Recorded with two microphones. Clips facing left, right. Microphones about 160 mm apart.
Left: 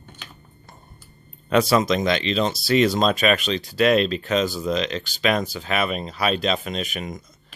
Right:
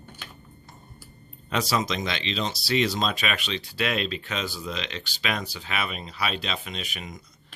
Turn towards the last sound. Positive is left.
turn(degrees=45)  # may be behind; listen again after turning